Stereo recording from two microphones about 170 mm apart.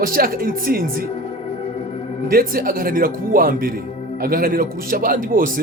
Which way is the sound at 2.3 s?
60° right (ahead or behind).